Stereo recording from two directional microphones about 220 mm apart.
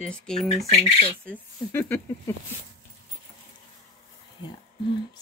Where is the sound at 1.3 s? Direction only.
10° left (ahead or behind).